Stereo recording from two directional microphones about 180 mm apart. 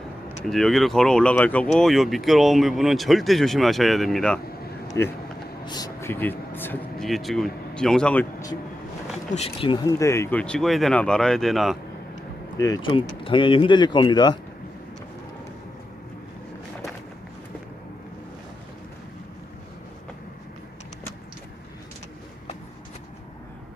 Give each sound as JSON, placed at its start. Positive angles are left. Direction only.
{"t": 0.4, "sound": "speech", "side_deg": 0}
{"t": 5.6, "sound": "speech", "side_deg": 20}
{"t": 9.6, "sound": "speech", "side_deg": 25}
{"t": 12.5, "sound": "speech", "side_deg": 20}